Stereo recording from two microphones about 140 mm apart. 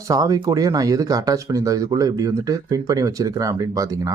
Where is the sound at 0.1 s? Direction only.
25° right (ahead or behind).